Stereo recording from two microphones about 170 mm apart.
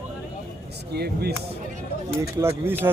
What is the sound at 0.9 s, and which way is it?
Speech, 70° right (ahead or behind).